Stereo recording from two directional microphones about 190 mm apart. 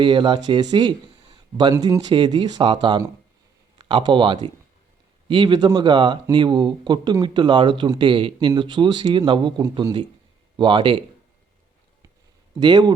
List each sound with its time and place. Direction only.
0.0 s speech: 25° right (ahead or behind)
12.5 s speech: 20° right (ahead or behind)